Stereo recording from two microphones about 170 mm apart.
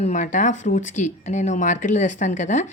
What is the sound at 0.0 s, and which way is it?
Speech, 50° left (ahead or behind).